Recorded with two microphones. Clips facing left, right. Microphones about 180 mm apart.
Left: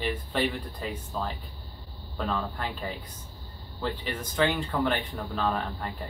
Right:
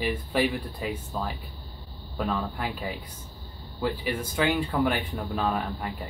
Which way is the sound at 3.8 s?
10° right (ahead or behind).